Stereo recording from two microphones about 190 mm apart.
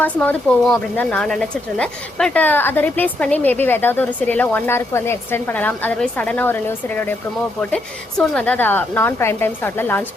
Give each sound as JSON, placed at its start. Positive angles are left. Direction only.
{"t": 0.0, "sound": "speech", "side_deg": 5}
{"t": 8.2, "sound": "speech", "side_deg": 5}